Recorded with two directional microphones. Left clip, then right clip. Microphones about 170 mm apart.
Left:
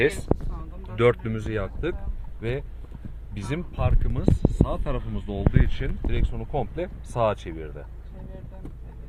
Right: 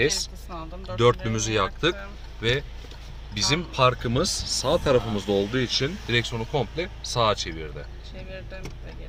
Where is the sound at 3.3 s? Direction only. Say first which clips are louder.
Right 9 dB; 10° right (ahead or behind).